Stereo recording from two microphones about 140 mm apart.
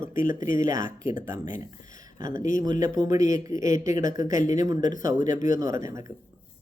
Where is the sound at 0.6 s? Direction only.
25° right (ahead or behind).